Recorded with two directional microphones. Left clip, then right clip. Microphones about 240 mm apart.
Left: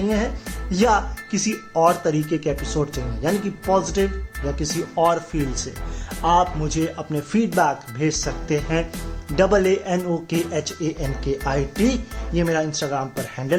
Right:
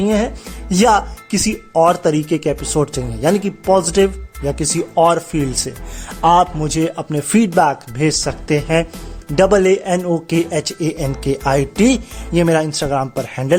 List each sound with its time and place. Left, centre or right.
0.0 s speech: right